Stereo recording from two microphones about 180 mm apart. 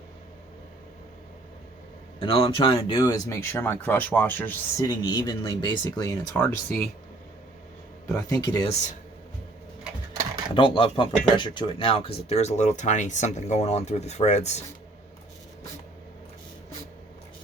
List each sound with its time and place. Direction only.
2.1 s speech: 30° left (ahead or behind); by 4.9 s 10° left (ahead or behind)
4.9 s speech: 20° left (ahead or behind)
8.1 s speech: 20° left (ahead or behind)
10.5 s speech: 30° left (ahead or behind)